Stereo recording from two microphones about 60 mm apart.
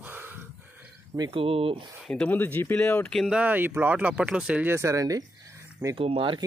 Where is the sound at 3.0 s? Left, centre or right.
Centre.